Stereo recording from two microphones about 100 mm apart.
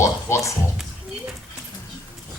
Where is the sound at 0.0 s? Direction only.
30° left (ahead or behind).